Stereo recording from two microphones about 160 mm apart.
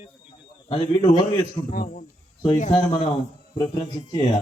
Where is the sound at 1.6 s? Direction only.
60° left (ahead or behind).